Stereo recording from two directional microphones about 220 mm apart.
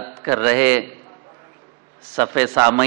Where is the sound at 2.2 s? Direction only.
15° right (ahead or behind).